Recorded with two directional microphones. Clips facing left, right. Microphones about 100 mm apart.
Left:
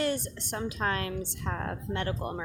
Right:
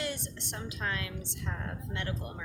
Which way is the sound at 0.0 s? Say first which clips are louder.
Left 7 dB; 45° left (ahead or behind).